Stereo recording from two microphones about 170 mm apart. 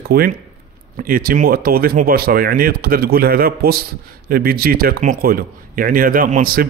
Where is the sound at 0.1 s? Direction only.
65° right (ahead or behind).